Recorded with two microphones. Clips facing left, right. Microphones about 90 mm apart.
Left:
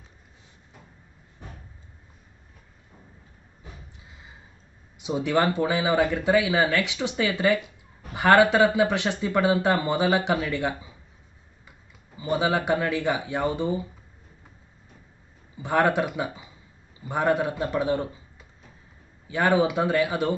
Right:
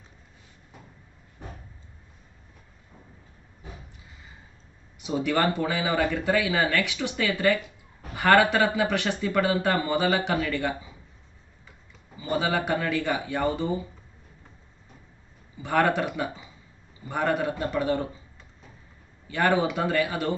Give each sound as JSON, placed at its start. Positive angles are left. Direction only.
{"t": 4.9, "sound": "speech", "side_deg": 20}
{"t": 12.2, "sound": "speech", "side_deg": 15}
{"t": 15.6, "sound": "a man's voice", "side_deg": 20}